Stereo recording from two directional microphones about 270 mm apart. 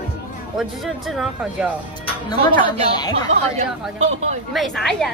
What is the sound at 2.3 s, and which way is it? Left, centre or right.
Speech, centre.